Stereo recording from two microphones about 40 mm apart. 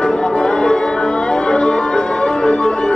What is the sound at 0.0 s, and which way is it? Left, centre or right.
Music, left.